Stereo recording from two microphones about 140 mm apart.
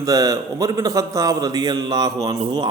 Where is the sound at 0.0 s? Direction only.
25° right (ahead or behind).